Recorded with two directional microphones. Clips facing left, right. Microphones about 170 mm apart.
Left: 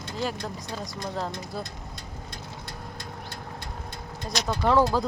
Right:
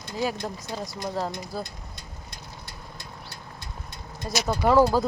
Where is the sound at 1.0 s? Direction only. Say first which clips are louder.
Right 2 dB; 5° right (ahead or behind).